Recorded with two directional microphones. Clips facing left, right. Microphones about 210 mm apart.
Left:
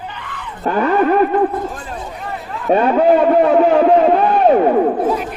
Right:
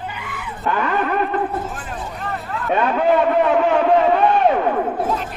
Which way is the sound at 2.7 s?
35° left (ahead or behind).